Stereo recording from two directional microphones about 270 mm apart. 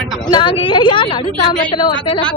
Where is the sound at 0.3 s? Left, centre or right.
Centre.